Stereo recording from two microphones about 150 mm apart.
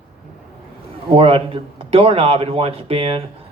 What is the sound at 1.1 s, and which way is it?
Speech, 40° right (ahead or behind).